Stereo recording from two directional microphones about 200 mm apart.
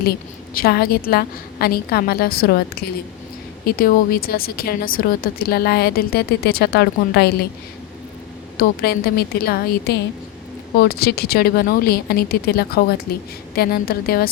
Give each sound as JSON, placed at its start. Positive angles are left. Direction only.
{"t": 0.0, "sound": "a woman's voice", "side_deg": 50}
{"t": 8.5, "sound": "a woman's voice", "side_deg": 50}